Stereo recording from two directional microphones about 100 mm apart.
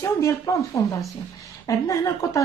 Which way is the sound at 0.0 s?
30° left (ahead or behind).